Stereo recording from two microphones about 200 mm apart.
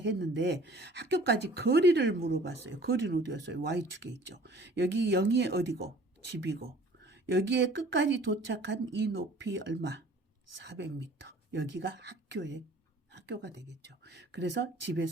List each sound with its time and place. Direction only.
0.0 s speech: 60° right (ahead or behind)
11.5 s speech: 65° right (ahead or behind)